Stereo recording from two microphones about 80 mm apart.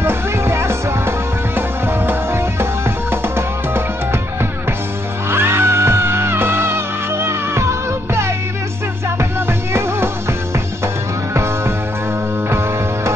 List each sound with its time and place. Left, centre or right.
0.0 s music: right